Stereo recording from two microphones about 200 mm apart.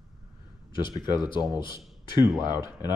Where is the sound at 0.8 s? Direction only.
20° left (ahead or behind).